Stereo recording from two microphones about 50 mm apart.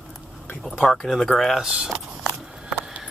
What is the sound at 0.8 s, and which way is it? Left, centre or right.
Speech, centre.